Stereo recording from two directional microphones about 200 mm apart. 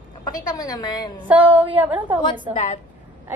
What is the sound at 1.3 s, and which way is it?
Speech, 10° right (ahead or behind).